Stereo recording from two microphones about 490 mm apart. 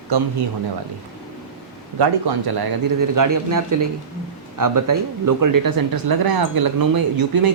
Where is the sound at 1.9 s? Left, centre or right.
Right.